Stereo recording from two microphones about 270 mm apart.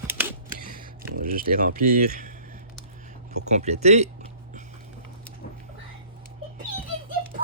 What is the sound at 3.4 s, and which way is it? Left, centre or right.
Speech, right.